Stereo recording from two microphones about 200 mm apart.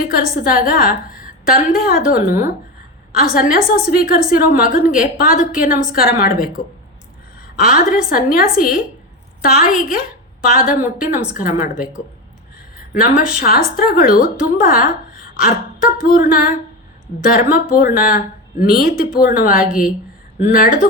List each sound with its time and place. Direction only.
0.0 s a woman's voice: 45° left (ahead or behind)
12.9 s a woman's voice: 45° left (ahead or behind)